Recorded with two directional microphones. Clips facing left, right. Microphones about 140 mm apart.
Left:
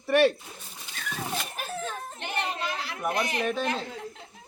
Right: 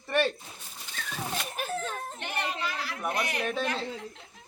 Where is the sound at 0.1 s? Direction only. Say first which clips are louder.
Left 6 dB; 10° left (ahead or behind).